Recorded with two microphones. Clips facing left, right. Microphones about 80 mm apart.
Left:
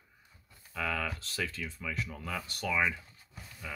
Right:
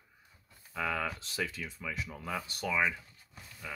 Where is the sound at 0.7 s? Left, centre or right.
Centre.